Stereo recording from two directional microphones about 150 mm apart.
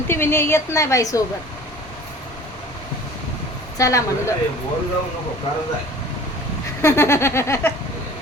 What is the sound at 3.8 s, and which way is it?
Speech, 20° left (ahead or behind).